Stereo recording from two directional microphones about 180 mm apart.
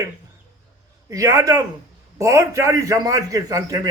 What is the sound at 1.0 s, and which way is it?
A man's voice, 15° right (ahead or behind).